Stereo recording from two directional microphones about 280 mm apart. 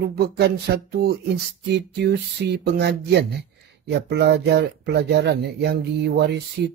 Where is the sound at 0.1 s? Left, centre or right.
Right.